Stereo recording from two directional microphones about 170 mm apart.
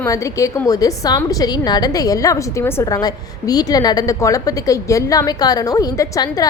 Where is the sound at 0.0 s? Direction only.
20° left (ahead or behind).